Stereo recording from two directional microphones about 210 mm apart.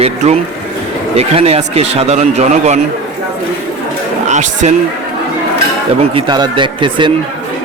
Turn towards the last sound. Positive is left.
turn(degrees=-25)  # may be behind; listen again after turning